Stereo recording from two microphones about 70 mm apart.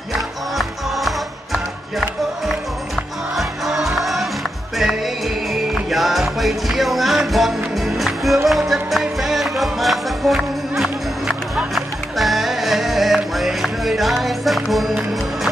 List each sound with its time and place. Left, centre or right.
0.6 s music: centre
5.5 s music: centre